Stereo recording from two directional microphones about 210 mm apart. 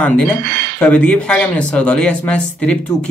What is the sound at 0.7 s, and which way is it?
Speech, 5° left (ahead or behind).